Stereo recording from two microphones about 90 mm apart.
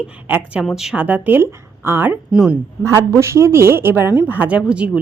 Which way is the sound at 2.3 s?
10° right (ahead or behind).